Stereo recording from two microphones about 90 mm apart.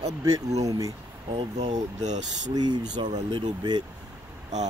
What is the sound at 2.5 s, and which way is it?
Speech, 50° right (ahead or behind).